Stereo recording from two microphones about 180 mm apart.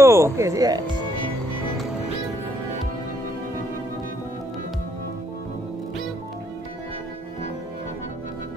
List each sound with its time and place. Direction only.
0.0 s speech: 15° right (ahead or behind)